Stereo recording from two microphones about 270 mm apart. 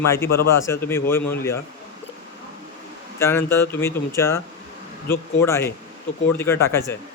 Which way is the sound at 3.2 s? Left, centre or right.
Centre.